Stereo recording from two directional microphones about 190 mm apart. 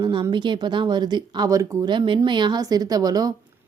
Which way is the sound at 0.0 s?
25° right (ahead or behind).